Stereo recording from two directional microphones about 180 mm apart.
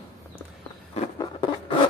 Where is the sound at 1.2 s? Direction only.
25° left (ahead or behind).